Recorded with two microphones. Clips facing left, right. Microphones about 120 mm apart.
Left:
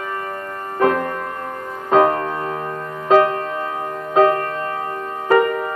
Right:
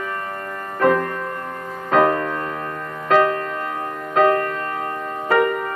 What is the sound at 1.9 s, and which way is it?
Music, 25° left (ahead or behind).